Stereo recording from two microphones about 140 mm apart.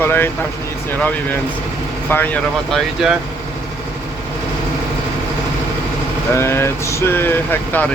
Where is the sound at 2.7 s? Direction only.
5° right (ahead or behind).